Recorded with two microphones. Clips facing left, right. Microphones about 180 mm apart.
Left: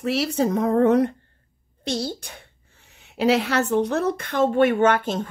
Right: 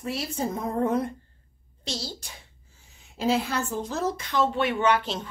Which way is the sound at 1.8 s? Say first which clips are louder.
Left 8 dB; 60° left (ahead or behind).